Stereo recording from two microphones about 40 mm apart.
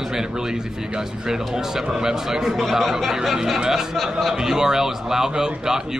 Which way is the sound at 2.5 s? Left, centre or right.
Centre.